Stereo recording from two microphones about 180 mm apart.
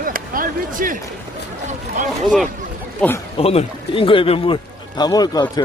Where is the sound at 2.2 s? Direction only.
Centre (ahead or behind).